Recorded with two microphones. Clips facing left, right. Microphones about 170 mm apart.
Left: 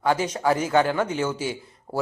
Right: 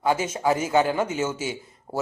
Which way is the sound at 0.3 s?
20° right (ahead or behind).